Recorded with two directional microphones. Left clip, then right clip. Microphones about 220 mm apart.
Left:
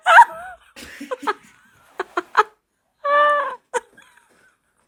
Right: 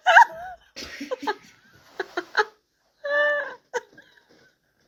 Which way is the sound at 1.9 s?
15° left (ahead or behind).